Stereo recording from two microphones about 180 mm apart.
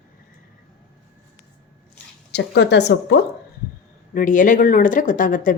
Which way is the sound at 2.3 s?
75° left (ahead or behind).